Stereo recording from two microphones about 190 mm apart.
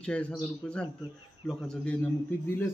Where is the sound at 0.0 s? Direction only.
5° left (ahead or behind).